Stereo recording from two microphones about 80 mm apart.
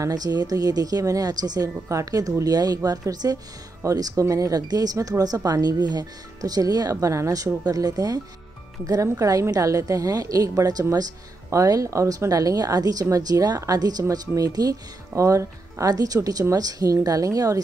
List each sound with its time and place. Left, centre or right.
0.0 s a woman's voice: right